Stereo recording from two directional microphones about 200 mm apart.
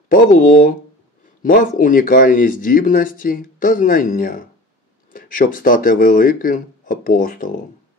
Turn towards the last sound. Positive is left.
turn(degrees=45)  # may be behind; listen again after turning